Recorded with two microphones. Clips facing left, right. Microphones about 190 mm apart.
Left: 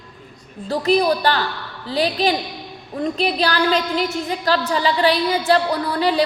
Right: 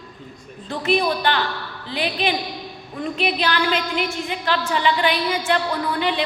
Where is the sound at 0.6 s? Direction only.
35° left (ahead or behind).